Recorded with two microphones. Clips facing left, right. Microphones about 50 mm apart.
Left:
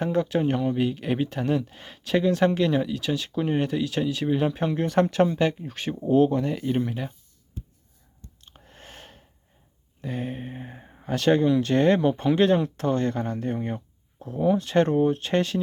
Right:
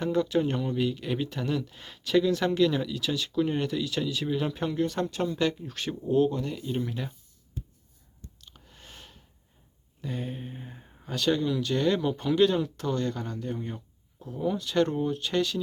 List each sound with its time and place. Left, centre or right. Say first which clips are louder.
0.0 s speech: left 2 dB; left
0.8 s speech: left 4 dB; left
4.9 s speech: left 9 dB; left
5.3 s speech: left 3 dB; left
5.7 s speech: left 3 dB; centre
6.0 s speech: left 5 dB; left
8.4 s a sound: left 6 dB; left
10.0 s a sound: left 4 dB; left
11.1 s speech: left 6 dB; left